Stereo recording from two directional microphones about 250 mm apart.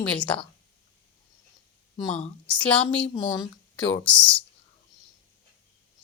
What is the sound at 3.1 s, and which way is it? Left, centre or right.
A woman's voice, centre.